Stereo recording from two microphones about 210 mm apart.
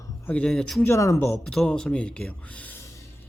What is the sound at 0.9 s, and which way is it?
Speech, 15° left (ahead or behind).